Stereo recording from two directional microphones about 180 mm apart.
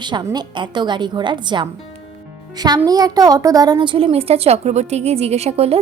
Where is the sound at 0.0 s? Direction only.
25° right (ahead or behind).